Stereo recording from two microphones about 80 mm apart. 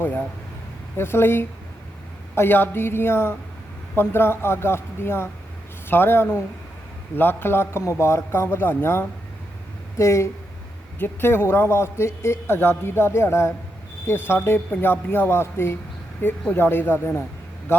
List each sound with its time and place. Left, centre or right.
0.9 s a man's voice: left